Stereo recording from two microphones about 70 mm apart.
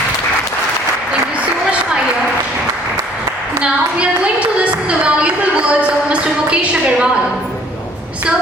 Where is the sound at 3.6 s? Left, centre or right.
Centre.